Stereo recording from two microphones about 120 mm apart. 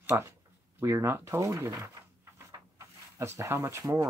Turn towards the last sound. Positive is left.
turn(degrees=-25)  # may be behind; listen again after turning